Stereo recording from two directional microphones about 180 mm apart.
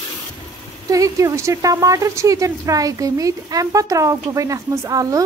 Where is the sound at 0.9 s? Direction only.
20° right (ahead or behind).